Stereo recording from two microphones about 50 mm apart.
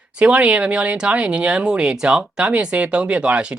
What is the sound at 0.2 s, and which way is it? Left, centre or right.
Speech, right.